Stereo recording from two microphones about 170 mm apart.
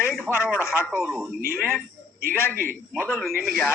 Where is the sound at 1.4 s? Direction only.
60° right (ahead or behind).